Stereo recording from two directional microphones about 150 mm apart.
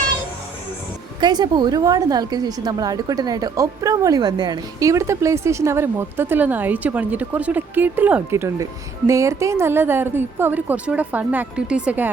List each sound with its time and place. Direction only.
1.2 s a woman's voice: 30° right (ahead or behind); by 12.1 s 10° right (ahead or behind)